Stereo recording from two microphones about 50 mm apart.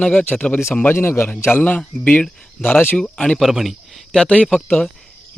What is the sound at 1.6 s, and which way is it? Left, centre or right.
Speech, left.